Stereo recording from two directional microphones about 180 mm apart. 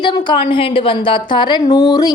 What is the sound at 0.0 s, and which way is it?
A woman's voice, 25° left (ahead or behind).